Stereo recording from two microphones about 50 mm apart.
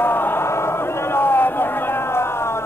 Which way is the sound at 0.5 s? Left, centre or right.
Left.